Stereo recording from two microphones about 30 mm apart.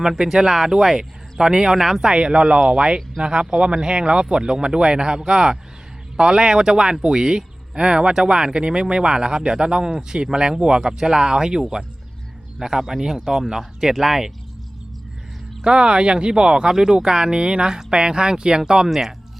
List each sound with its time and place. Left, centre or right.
0.0 s speech: centre
1.4 s speech: right
2.2 s speech: right
12.5 s speech: centre
15.6 s speech: right